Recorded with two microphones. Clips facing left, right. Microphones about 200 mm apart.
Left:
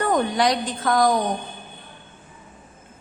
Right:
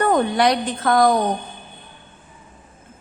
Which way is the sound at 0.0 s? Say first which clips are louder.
Right 3 dB; 60° right (ahead or behind).